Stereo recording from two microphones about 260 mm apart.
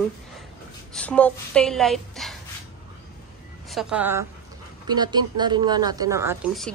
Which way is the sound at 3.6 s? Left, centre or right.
Centre.